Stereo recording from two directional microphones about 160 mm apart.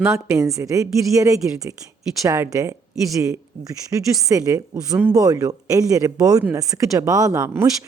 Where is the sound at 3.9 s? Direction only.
20° right (ahead or behind).